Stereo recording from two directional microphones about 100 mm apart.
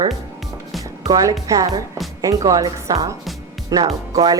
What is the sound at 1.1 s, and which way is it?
A woman's voice, 35° right (ahead or behind).